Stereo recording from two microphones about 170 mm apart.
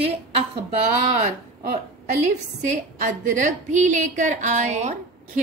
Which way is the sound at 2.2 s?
45° right (ahead or behind).